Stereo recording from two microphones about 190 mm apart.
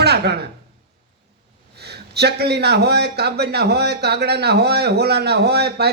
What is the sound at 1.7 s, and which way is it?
A man's voice, 60° right (ahead or behind).